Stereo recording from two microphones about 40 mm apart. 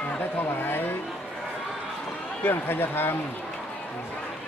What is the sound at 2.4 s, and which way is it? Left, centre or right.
Speech, left.